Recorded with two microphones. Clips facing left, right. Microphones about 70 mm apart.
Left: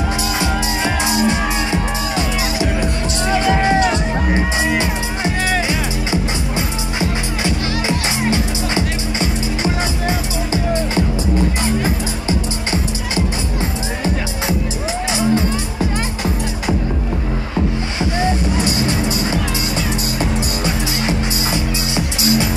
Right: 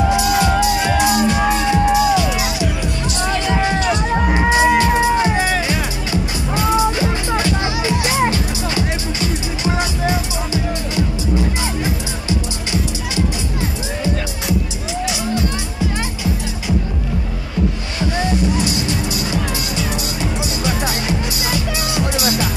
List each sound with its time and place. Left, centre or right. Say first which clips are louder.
0.3 s music: right 5 dB; left
6.5 s music: right 6 dB; left
18.2 s music: even; left